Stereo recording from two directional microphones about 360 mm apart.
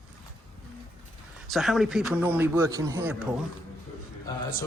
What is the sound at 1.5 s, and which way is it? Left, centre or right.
Speech, centre.